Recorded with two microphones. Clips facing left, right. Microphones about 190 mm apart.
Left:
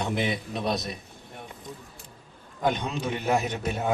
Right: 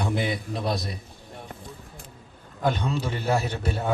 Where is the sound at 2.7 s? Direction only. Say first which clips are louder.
Right 1 dB; 15° left (ahead or behind).